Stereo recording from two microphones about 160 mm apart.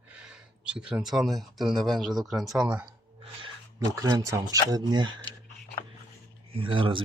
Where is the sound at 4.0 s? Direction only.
25° right (ahead or behind).